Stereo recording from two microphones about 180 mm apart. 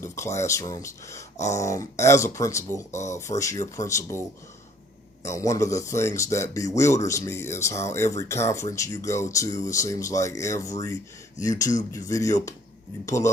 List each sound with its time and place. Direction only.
0.0 s speech: 15° left (ahead or behind)
5.3 s speech: 15° left (ahead or behind)